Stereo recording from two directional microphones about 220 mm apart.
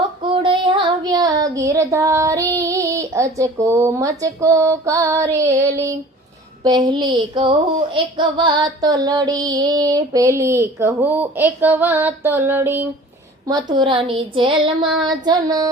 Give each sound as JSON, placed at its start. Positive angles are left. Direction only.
{"t": 0.3, "sound": "child singing", "side_deg": -25}
{"t": 6.6, "sound": "speech", "side_deg": -20}
{"t": 13.5, "sound": "child singing", "side_deg": -20}